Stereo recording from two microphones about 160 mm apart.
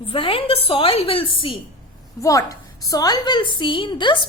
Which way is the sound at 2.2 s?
20° left (ahead or behind).